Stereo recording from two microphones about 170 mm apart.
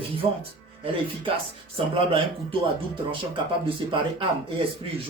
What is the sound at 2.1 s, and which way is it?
Speech, 30° right (ahead or behind).